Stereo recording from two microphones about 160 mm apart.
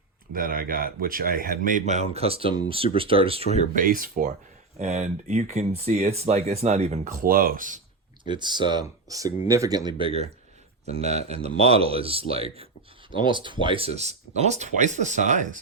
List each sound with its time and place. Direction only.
0.3 s speech: 65° right (ahead or behind); by 3.6 s 40° right (ahead or behind)
3.8 s speech: 60° right (ahead or behind)
4.8 s speech: 45° right (ahead or behind)
8.2 s speech: 30° right (ahead or behind)
10.8 s speech: 40° right (ahead or behind)